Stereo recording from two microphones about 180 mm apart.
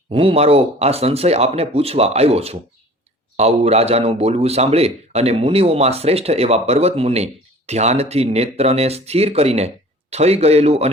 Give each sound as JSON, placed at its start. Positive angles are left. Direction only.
{"t": 0.1, "sound": "a man's voice", "side_deg": -30}